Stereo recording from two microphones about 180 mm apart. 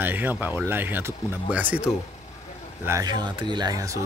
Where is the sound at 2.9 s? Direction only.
20° right (ahead or behind).